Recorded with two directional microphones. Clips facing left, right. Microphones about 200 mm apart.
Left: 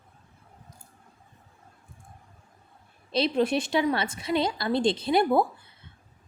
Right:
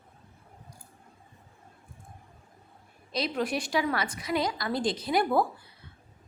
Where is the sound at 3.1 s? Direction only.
25° left (ahead or behind).